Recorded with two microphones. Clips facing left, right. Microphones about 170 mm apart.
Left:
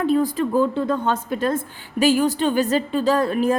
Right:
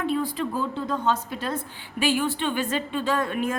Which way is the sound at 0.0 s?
40° left (ahead or behind).